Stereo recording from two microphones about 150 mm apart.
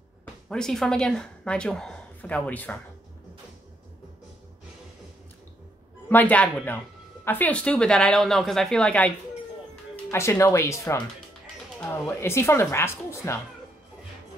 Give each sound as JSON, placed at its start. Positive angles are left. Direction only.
{"t": 0.2, "sound": "speech", "side_deg": 5}
{"t": 6.0, "sound": "speech", "side_deg": 10}
{"t": 10.1, "sound": "speech", "side_deg": 20}